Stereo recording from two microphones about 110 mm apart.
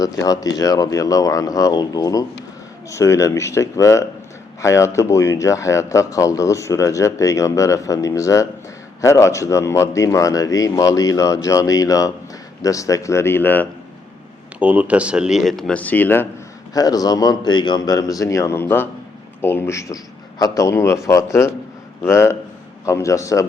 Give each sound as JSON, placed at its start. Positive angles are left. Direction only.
{"t": 0.0, "sound": "speech", "side_deg": 30}
{"t": 14.6, "sound": "speech", "side_deg": -15}
{"t": 16.7, "sound": "speech", "side_deg": 35}
{"t": 22.0, "sound": "speech", "side_deg": 25}